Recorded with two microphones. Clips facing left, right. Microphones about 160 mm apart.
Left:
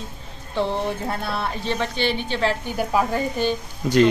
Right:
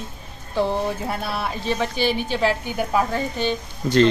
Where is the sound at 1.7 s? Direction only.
5° right (ahead or behind); by 4.1 s 10° left (ahead or behind).